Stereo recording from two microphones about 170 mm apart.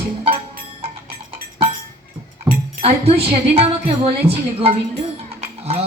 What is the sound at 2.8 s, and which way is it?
Speech, 35° right (ahead or behind).